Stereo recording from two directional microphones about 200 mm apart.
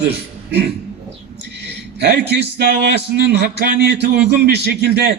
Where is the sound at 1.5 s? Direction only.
55° right (ahead or behind).